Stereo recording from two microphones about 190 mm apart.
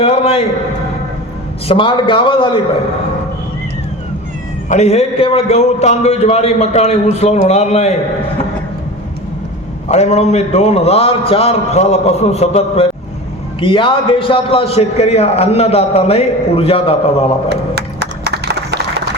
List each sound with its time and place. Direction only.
0.0 s a man's voice: 35° left (ahead or behind)
1.6 s a man's voice: 25° left (ahead or behind)
4.7 s a man's voice: 35° left (ahead or behind)
9.9 s a man's voice: 35° left (ahead or behind)
17.5 s a sound: 60° right (ahead or behind)